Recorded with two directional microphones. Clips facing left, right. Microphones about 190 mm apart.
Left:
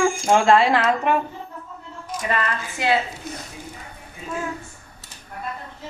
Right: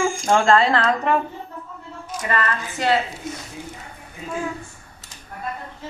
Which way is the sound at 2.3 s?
10° left (ahead or behind).